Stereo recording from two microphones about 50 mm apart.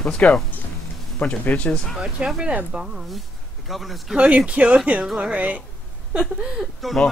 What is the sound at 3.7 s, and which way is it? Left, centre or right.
Speech, centre.